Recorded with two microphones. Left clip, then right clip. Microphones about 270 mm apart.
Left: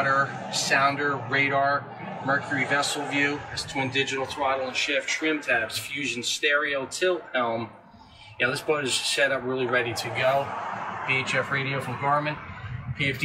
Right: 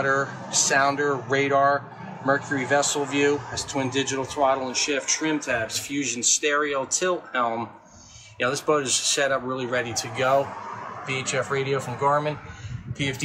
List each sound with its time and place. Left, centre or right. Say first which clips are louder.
0.0 s speech: even; centre